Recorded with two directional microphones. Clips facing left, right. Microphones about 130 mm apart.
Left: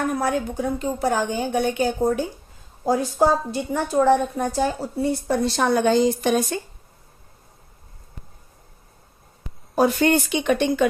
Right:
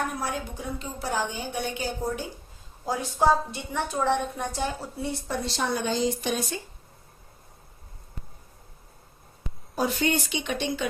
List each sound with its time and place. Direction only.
0.1 s a woman's voice: 50° left (ahead or behind)
5.3 s speech: 55° left (ahead or behind)
9.7 s a woman's voice: 55° left (ahead or behind)